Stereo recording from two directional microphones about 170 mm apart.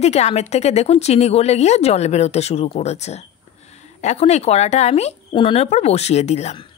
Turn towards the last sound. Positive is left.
turn(degrees=40)  # may be behind; listen again after turning